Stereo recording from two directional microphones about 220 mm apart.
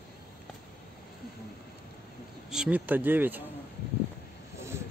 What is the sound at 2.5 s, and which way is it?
Speech, 5° right (ahead or behind).